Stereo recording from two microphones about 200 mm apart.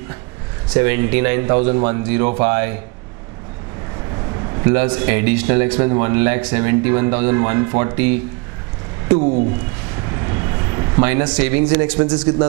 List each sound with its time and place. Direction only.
0.7 s a man's voice: 15° right (ahead or behind)
1.5 s speech: 30° right (ahead or behind)
4.6 s a man's voice: 20° right (ahead or behind)
10.2 s vehicle: 25° right (ahead or behind)
11.3 s a man's voice: 15° right (ahead or behind)